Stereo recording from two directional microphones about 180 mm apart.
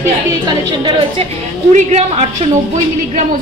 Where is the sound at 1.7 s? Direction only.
40° right (ahead or behind).